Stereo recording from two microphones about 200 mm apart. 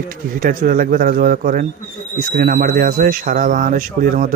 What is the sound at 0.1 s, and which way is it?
Speech, 45° right (ahead or behind).